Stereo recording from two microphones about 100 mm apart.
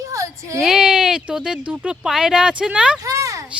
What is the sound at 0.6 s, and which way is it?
Speech, 5° right (ahead or behind).